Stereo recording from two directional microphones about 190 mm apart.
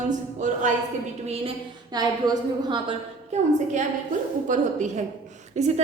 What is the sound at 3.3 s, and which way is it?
A woman's voice, 35° right (ahead or behind).